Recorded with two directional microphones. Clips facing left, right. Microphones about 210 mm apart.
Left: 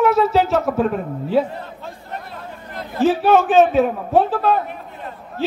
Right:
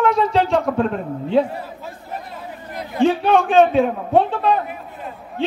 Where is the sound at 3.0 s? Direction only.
5° left (ahead or behind).